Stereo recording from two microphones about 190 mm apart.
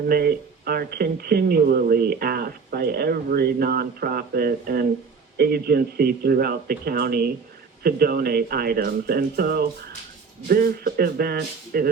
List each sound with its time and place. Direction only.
0.1 s speech: 55° right (ahead or behind)